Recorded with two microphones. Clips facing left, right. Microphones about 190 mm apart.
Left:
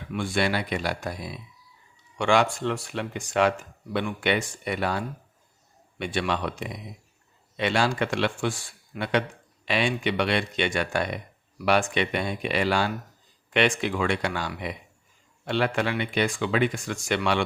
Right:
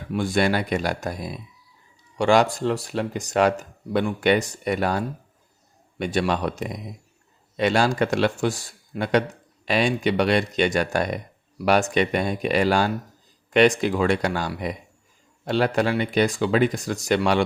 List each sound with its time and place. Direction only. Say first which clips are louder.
0.1 s a man's voice: right 4 dB; 40° right (ahead or behind)